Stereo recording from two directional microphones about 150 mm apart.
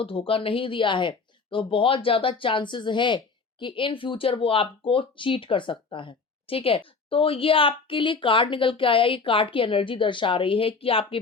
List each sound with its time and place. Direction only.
0.0 s speech: 35° left (ahead or behind)